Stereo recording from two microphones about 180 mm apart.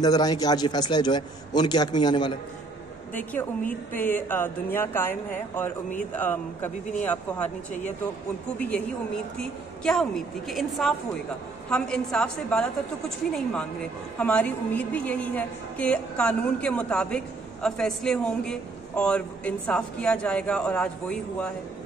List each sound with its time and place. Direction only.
0.0 s a man's voice: 20° left (ahead or behind)
3.2 s a woman's voice: 10° left (ahead or behind)
7.4 s speech: 40° left (ahead or behind)
8.5 s a woman's voice: 5° left (ahead or behind)